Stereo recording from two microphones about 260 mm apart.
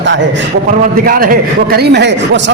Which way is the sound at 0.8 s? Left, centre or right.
Right.